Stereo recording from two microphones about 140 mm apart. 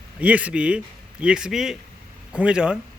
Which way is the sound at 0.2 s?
10° right (ahead or behind).